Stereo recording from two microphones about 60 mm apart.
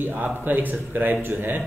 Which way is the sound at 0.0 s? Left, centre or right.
Right.